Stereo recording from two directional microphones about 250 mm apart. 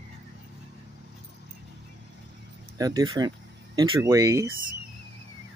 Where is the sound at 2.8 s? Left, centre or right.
Centre.